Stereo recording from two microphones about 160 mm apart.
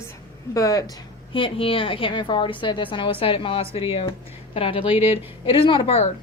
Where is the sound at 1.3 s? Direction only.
35° left (ahead or behind).